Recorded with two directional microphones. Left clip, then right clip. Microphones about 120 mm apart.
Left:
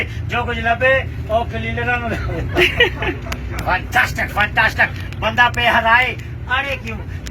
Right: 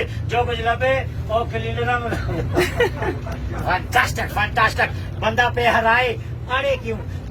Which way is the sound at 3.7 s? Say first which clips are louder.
Left 2 dB; 20° right (ahead or behind).